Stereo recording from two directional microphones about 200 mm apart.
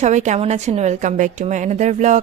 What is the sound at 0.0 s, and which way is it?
A woman's voice, 35° right (ahead or behind).